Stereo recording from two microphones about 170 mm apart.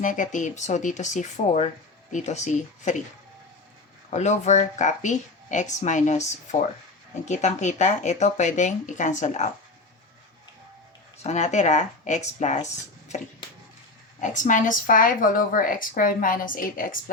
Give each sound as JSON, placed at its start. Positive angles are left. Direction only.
{"t": 0.0, "sound": "speech", "side_deg": 50}
{"t": 4.1, "sound": "speech", "side_deg": 45}
{"t": 11.2, "sound": "speech", "side_deg": 40}
{"t": 14.2, "sound": "speech", "side_deg": 45}